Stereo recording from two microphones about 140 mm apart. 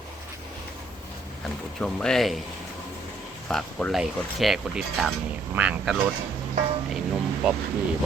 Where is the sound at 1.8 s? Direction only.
5° left (ahead or behind).